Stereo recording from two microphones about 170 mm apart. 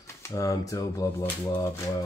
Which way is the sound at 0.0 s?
15° left (ahead or behind).